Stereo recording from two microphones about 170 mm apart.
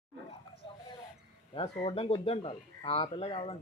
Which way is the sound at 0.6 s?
30° left (ahead or behind).